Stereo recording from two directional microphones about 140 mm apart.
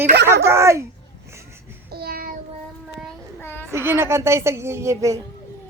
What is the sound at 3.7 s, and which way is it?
Speech, 15° right (ahead or behind).